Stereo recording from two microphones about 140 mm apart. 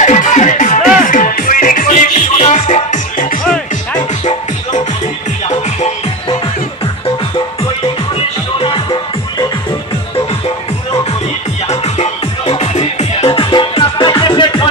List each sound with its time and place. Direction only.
0.0 s music: 60° left (ahead or behind)
1.0 s music: 70° left (ahead or behind)
11.7 s music: 50° left (ahead or behind)